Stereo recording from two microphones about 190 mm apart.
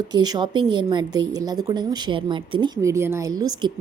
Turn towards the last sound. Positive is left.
turn(degrees=-20)  # may be behind; listen again after turning